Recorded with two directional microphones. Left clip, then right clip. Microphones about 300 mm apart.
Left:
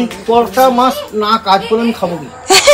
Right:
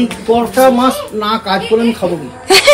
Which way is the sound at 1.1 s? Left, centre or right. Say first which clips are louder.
Left 4 dB; left.